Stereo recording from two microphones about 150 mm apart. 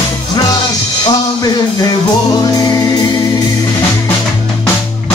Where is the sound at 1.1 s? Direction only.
25° left (ahead or behind).